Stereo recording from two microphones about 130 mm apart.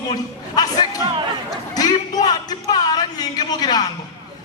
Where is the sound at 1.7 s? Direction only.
30° left (ahead or behind).